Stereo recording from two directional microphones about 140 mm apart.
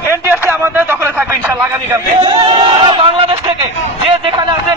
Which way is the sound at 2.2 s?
35° right (ahead or behind).